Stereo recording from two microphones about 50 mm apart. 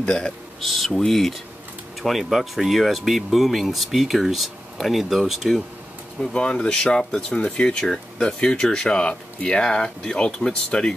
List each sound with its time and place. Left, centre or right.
0.0 s speech: centre
0.6 s speech: centre
6.2 s speech: centre